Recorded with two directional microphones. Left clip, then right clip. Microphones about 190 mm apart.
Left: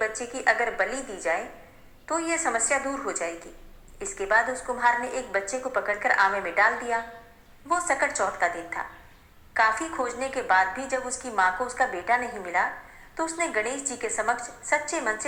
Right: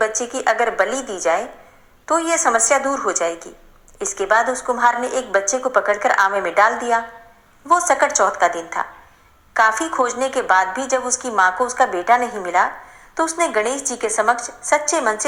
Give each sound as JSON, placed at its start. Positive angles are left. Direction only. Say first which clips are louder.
{"t": 0.2, "sound": "a woman's voice", "louder": "right 6 dB", "side_deg": -35}